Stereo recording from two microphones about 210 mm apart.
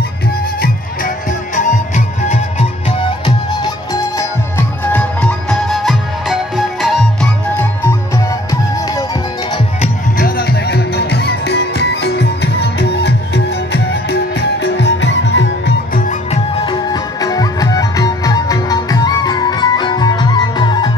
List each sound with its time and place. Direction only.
0.6 s music: 40° left (ahead or behind)
3.3 s music: 20° left (ahead or behind)
9.8 s music: 45° left (ahead or behind)
14.6 s music: 55° left (ahead or behind)
15.9 s music: 35° left (ahead or behind)
16.5 s music: 20° left (ahead or behind)